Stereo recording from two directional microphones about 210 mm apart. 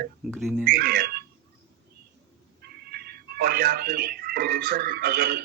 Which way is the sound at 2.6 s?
45° right (ahead or behind).